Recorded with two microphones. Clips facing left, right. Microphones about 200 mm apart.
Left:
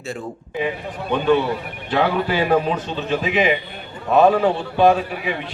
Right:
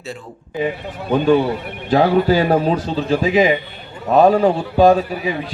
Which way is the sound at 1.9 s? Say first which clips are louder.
Right 6 dB; 40° right (ahead or behind).